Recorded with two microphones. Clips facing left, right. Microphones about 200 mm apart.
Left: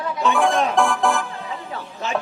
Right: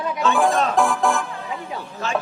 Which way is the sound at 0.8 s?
Centre (ahead or behind).